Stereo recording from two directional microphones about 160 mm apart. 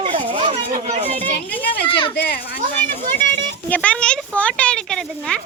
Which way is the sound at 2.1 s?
85° left.